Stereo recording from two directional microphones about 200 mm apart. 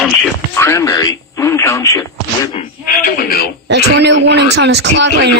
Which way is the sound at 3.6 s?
60° right (ahead or behind).